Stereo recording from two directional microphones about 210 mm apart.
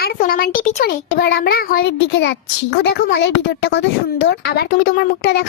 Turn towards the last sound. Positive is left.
turn(degrees=55)  # may be behind; listen again after turning